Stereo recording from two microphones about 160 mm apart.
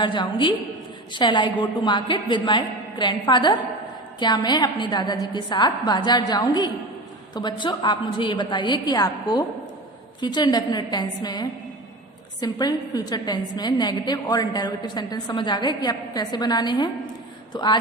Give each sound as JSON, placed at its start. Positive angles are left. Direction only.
{"t": 0.0, "sound": "a woman's voice", "side_deg": 30}